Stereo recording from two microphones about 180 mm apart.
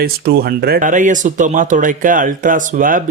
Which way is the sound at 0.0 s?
60° right (ahead or behind).